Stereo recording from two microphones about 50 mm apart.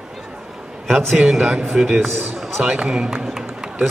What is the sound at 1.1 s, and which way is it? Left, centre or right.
Speech, centre.